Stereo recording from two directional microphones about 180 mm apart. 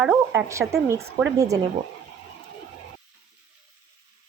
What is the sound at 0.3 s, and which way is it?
Speech, 15° right (ahead or behind).